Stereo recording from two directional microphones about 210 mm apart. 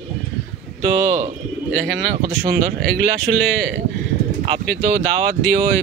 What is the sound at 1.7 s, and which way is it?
Speech, 50° right (ahead or behind).